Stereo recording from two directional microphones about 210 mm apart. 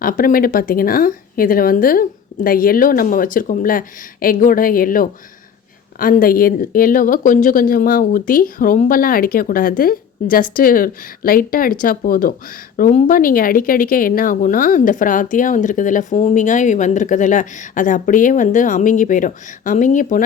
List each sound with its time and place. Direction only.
0.0 s speech: 40° left (ahead or behind)